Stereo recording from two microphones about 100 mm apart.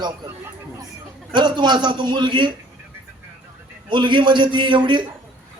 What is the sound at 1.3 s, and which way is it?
Speech, 50° right (ahead or behind).